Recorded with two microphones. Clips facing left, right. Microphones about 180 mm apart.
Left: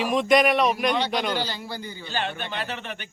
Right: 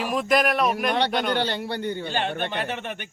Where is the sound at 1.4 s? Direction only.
60° right (ahead or behind).